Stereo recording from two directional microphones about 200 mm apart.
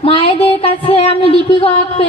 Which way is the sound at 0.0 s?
30° left (ahead or behind).